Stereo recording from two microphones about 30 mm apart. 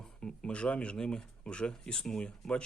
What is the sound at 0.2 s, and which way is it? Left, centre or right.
Speech, left.